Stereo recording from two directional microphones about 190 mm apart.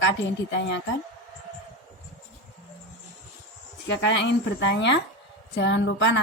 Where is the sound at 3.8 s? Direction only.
70° left (ahead or behind).